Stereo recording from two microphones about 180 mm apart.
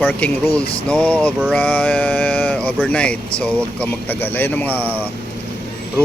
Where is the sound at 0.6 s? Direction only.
30° left (ahead or behind).